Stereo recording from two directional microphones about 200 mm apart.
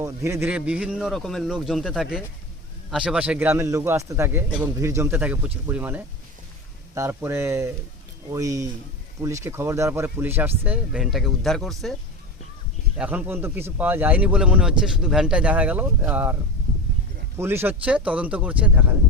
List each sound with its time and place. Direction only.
0.0 s a man's voice: 15° right (ahead or behind); by 11.9 s centre (ahead or behind)
13.0 s speech: 10° right (ahead or behind)